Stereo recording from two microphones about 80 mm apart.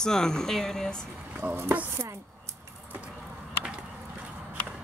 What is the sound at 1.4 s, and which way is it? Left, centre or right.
Speech, right.